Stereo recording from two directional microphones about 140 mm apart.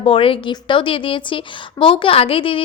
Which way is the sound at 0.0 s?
40° left (ahead or behind).